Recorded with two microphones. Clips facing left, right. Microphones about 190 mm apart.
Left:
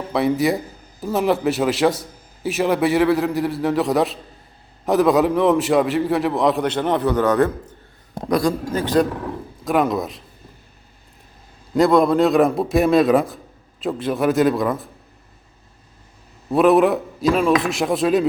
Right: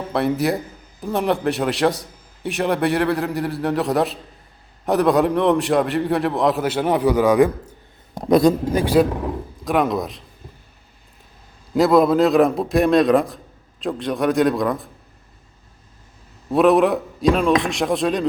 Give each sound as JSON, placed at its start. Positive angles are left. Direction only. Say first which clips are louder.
{"t": 0.1, "sound": "a man's voice", "louder": "left 2 dB", "side_deg": 0}
{"t": 8.3, "sound": "a man's voice", "louder": "right 5 dB", "side_deg": -20}
{"t": 9.6, "sound": "a man's voice", "louder": "left 1 dB", "side_deg": 0}
{"t": 11.7, "sound": "a man's voice", "louder": "even", "side_deg": 0}
{"t": 16.5, "sound": "a man's voice", "louder": "left 1 dB", "side_deg": 0}